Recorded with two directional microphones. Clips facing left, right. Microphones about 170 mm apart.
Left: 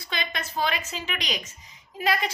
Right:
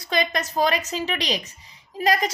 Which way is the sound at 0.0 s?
40° right (ahead or behind).